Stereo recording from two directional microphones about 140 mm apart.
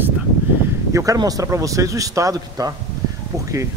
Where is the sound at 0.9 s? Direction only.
25° right (ahead or behind).